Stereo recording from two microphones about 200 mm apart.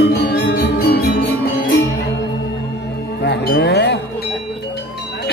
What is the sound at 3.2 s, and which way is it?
Music, 55° left (ahead or behind).